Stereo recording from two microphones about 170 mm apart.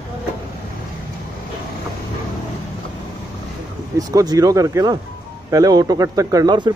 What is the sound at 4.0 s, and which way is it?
Speech, 20° right (ahead or behind).